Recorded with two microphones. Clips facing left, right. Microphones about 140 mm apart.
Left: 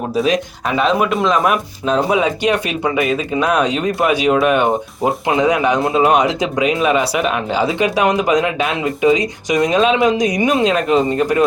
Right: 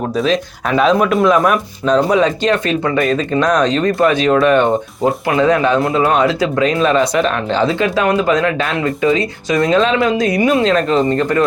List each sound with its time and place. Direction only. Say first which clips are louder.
0.8 s speech: right 3 dB; centre (ahead or behind)